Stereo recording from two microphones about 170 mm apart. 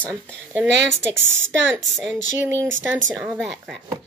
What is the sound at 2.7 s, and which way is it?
Speech, 90° right.